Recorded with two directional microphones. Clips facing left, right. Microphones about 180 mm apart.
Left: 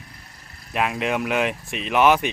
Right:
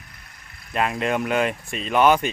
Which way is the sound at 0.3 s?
35° left (ahead or behind).